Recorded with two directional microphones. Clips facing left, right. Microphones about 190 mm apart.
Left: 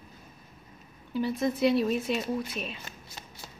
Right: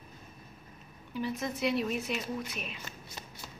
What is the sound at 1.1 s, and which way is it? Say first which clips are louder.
Speech: left 6 dB; 30° left (ahead or behind).